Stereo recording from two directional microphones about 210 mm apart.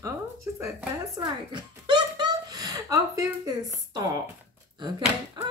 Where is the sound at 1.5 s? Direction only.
20° right (ahead or behind).